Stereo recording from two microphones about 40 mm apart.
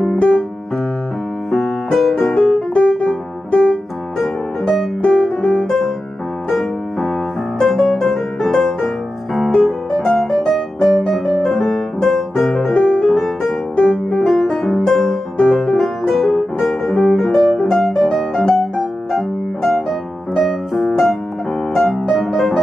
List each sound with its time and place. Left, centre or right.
1.5 s music: centre
2.3 s music: centre
4.2 s music: centre
5.0 s music: left
6.5 s music: centre
7.5 s piano: centre
7.9 s music: centre
16.2 s music: centre
16.9 s music: left
17.2 s music: centre
19.7 s piano: centre